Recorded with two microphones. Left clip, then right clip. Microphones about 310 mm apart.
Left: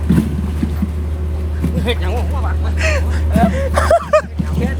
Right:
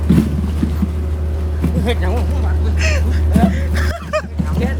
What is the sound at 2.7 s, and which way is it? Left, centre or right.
Speech, centre.